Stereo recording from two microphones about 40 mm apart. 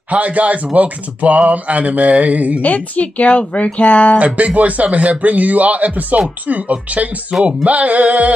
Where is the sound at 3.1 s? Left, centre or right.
Left.